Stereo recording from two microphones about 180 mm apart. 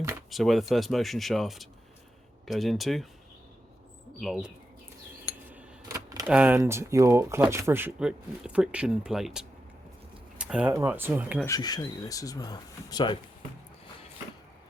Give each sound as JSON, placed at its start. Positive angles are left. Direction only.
{"t": 0.3, "sound": "speech", "side_deg": 0}
{"t": 4.2, "sound": "speech", "side_deg": 0}
{"t": 5.5, "sound": "a sound", "side_deg": -20}
{"t": 6.2, "sound": "speech", "side_deg": -10}
{"t": 10.3, "sound": "a sound", "side_deg": -5}
{"t": 10.7, "sound": "speech", "side_deg": -15}
{"t": 11.4, "sound": "speech", "side_deg": 20}